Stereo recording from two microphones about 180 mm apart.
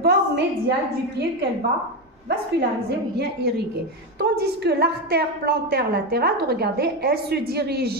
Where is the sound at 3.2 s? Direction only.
65° right (ahead or behind).